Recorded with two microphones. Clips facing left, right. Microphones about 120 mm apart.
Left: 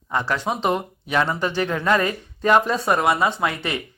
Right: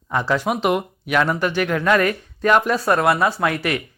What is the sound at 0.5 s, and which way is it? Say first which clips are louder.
Speech: right 3 dB; 15° right (ahead or behind).